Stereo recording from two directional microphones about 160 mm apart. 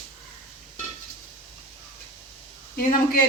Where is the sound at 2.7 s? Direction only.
65° left (ahead or behind).